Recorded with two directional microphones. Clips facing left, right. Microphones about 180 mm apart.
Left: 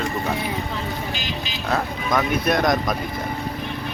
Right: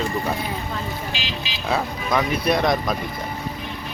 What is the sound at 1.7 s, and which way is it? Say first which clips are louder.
Speech: even; centre (ahead or behind).